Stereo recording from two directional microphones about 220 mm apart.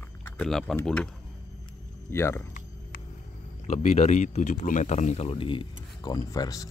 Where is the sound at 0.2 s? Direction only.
5° left (ahead or behind).